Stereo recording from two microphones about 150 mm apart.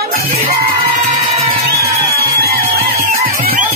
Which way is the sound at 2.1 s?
90° right.